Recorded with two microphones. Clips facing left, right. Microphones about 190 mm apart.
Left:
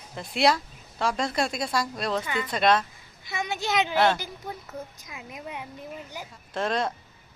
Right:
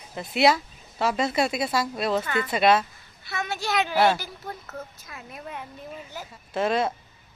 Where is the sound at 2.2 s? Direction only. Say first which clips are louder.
Right 3 dB; 10° left (ahead or behind).